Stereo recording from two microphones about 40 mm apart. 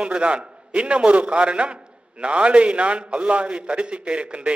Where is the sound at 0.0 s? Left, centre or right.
Right.